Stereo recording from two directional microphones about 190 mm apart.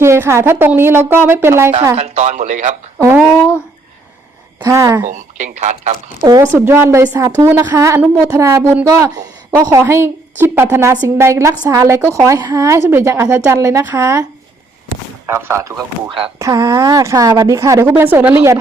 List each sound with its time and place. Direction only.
0.0 s speech: 15° right (ahead or behind)
2.0 s speech: 35° right (ahead or behind)
3.0 s speech: 10° right (ahead or behind)
4.6 s speech: 15° right (ahead or behind)
5.1 s speech: 40° right (ahead or behind)
6.5 s speech: 10° right (ahead or behind)
15.3 s speech: 15° right (ahead or behind)